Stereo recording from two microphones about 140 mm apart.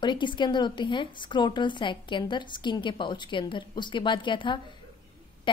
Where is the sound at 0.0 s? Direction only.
35° left (ahead or behind).